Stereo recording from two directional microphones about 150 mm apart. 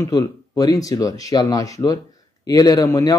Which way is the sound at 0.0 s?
20° left (ahead or behind).